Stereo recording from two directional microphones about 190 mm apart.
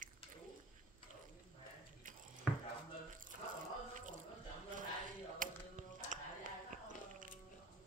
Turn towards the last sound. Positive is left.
turn(degrees=-45)  # may be behind; listen again after turning